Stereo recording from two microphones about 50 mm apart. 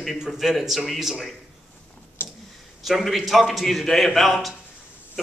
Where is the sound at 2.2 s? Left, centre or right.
Left.